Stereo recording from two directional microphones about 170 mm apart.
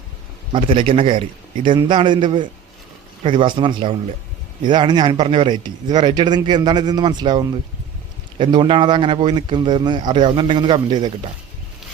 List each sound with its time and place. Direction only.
0.5 s a man's voice: 30° right (ahead or behind)